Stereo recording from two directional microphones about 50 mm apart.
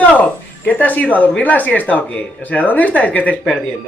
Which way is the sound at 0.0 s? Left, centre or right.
Left.